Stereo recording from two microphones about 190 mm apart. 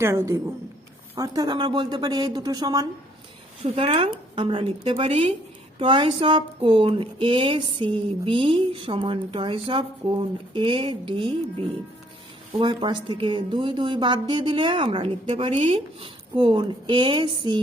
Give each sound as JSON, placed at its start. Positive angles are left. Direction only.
{"t": 0.0, "sound": "speech", "side_deg": -15}
{"t": 3.8, "sound": "speech", "side_deg": -30}
{"t": 12.5, "sound": "speech", "side_deg": -25}